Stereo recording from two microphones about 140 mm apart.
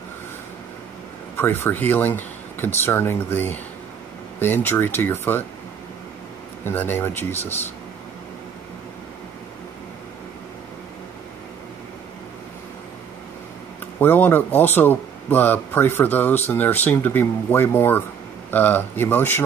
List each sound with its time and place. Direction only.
1.3 s a man's voice: 15° left (ahead or behind)
6.6 s a man's voice: 15° left (ahead or behind)
13.9 s a man's voice: 15° left (ahead or behind)